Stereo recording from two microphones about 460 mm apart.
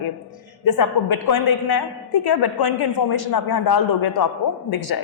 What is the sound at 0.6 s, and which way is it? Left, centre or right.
A man's voice, left.